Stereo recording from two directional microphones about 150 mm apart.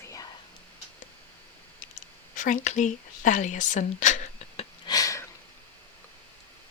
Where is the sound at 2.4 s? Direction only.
55° left (ahead or behind).